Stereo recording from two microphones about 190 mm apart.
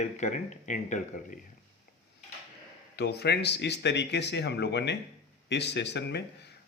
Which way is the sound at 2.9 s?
60° left (ahead or behind).